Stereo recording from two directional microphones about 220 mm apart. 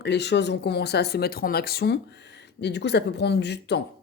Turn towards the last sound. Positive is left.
turn(degrees=50)  # may be behind; listen again after turning